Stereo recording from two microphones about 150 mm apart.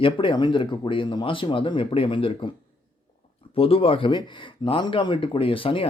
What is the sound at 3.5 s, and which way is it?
Speech, 40° left (ahead or behind).